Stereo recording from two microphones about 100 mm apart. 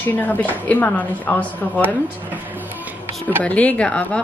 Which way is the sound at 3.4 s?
15° left (ahead or behind).